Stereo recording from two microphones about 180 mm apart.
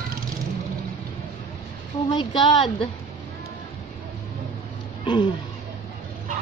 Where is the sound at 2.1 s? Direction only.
25° left (ahead or behind).